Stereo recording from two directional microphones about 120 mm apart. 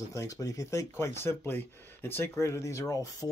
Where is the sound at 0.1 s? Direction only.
25° left (ahead or behind).